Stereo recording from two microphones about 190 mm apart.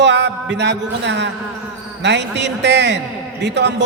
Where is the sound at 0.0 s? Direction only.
65° right (ahead or behind).